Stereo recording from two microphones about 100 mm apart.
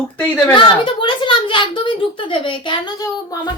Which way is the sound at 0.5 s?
55° left (ahead or behind).